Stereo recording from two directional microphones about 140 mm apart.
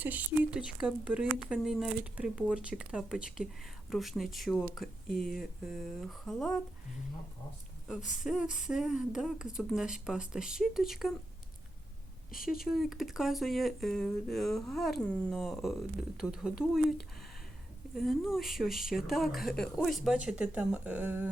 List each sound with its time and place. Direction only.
0.0 s speech: 10° right (ahead or behind)
7.9 s speech: 5° right (ahead or behind)
12.3 s speech: 90° left
12.6 s speech: centre (ahead or behind)
17.9 s speech: centre (ahead or behind)